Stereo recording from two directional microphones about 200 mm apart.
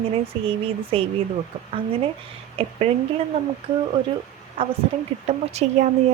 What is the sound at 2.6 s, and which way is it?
Speech, 30° right (ahead or behind).